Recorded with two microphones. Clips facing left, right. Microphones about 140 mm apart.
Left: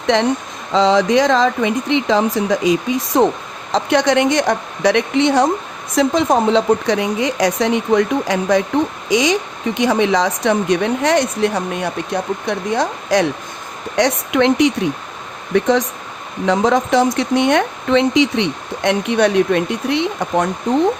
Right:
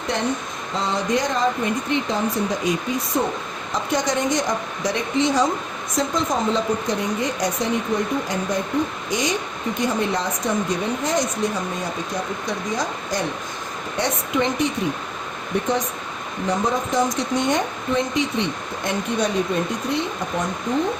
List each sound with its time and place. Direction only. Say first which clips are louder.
0.1 s speech: left 6 dB; 90° left
3.7 s a woman's voice: left 8 dB; 70° left (ahead or behind)
15.5 s speech: left 8 dB; 90° left; by 20.5 s 75° left (ahead or behind)